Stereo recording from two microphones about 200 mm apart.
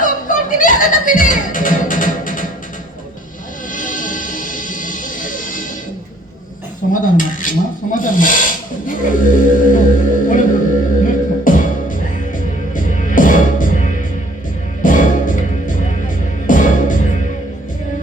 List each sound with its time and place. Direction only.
0.0 s music: 40° left (ahead or behind)
3.7 s music: 40° left (ahead or behind)
6.9 s cutlery: 40° left (ahead or behind)
7.9 s a sound: 40° left (ahead or behind)
11.0 s music: 40° left (ahead or behind)